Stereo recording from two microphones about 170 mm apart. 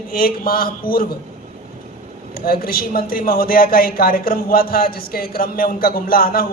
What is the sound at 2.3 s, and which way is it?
A woman's voice, 60° left (ahead or behind).